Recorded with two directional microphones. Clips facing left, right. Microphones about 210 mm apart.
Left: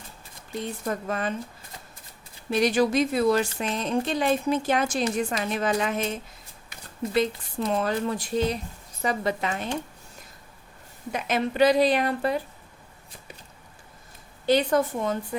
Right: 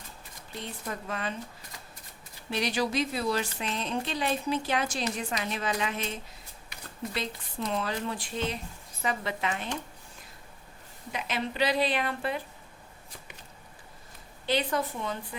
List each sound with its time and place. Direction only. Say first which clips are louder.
0.6 s a woman's voice: left 7 dB; 45° left (ahead or behind)
2.5 s a woman's voice: left 7 dB; 45° left (ahead or behind)
11.1 s a woman's voice: left 6 dB; 45° left (ahead or behind)
14.4 s a woman's voice: left 7 dB; 45° left (ahead or behind)